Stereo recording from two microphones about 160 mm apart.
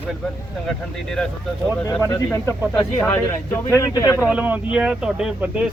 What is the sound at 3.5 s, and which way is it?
Speech, 15° left (ahead or behind).